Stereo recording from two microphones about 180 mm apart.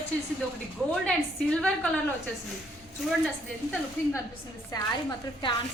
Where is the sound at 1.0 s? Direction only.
5° left (ahead or behind).